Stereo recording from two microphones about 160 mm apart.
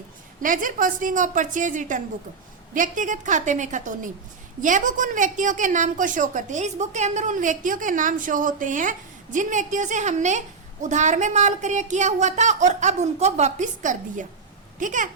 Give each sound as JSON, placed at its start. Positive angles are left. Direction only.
{"t": 0.4, "sound": "a woman's voice", "side_deg": -55}